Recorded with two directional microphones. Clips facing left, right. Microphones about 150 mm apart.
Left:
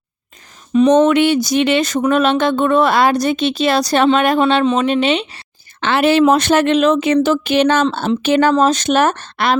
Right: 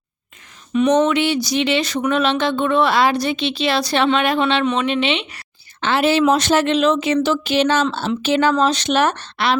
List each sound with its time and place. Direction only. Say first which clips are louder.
0.7 s speech: left 5 dB; 35° left (ahead or behind)
1.0 s speech: left 5 dB; 50° left (ahead or behind)
5.8 s speech: left 3 dB; 65° left (ahead or behind); by 9.6 s 45° left (ahead or behind)